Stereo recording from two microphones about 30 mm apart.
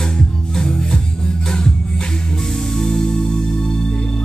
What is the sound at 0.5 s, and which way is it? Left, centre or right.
Music, left.